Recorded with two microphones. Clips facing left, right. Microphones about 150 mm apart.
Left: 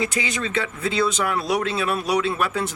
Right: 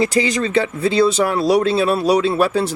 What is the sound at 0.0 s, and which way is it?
Speech, 35° right (ahead or behind).